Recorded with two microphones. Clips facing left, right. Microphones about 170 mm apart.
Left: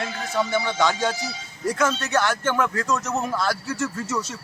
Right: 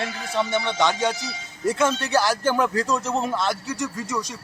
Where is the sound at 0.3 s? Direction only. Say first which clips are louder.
Even; 25° right (ahead or behind).